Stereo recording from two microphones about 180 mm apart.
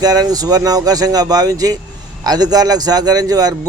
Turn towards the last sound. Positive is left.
turn(degrees=-20)  # may be behind; listen again after turning